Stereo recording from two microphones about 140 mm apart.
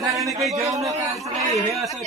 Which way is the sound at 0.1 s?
25° right (ahead or behind).